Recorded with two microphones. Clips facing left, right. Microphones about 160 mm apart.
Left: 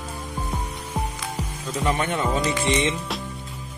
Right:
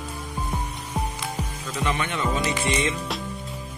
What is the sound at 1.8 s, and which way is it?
Speech, 40° left (ahead or behind).